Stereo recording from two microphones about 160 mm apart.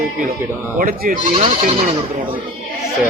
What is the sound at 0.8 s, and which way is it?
Speech, 60° right (ahead or behind).